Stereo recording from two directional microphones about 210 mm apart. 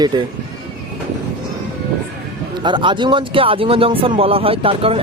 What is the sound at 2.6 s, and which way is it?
Speech, 20° right (ahead or behind).